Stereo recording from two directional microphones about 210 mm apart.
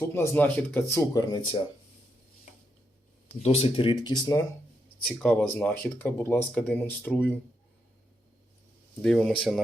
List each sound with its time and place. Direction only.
0.0 s speech: 15° left (ahead or behind)
3.4 s speech: 30° left (ahead or behind)
5.0 s speech: 5° left (ahead or behind)
9.0 s speech: 5° left (ahead or behind)